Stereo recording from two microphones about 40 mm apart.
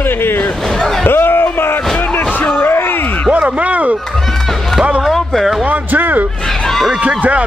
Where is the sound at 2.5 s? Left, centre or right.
Left.